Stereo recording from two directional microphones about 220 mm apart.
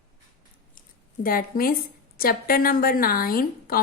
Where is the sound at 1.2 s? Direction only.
40° left (ahead or behind).